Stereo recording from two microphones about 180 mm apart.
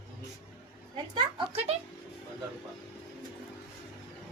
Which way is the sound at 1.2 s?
35° right (ahead or behind).